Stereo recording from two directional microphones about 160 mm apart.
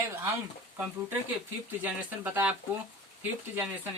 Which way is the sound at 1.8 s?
10° right (ahead or behind).